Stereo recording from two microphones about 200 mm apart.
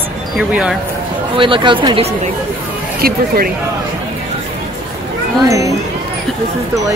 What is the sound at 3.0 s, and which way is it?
Speech, 50° right (ahead or behind).